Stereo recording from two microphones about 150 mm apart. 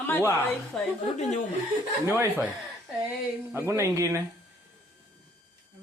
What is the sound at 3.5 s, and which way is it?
Speech, 20° right (ahead or behind).